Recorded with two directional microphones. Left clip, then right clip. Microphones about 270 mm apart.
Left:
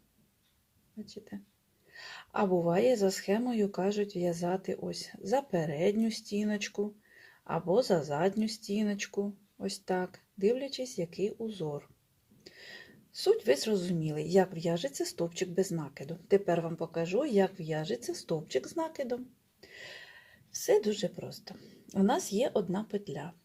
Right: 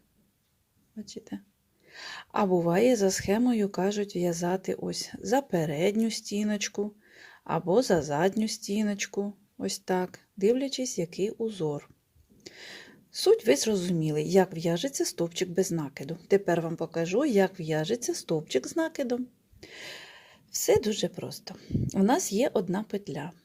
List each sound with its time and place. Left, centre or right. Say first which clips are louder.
1.0 s speech: right 6 dB; right